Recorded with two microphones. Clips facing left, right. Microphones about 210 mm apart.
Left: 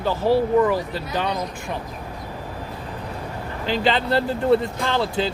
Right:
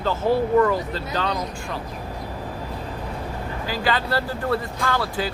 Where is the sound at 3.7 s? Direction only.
25° left (ahead or behind).